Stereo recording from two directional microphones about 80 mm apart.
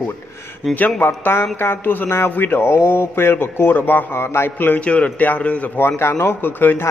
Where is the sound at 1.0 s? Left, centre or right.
Left.